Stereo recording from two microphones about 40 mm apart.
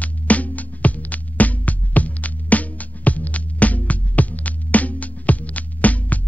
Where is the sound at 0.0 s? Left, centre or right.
Left.